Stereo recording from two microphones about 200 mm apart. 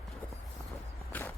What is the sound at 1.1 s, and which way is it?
Walk, 10° left (ahead or behind).